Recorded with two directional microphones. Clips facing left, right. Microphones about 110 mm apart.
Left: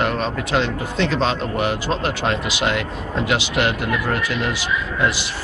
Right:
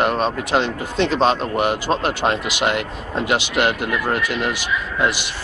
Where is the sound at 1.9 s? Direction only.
25° right (ahead or behind).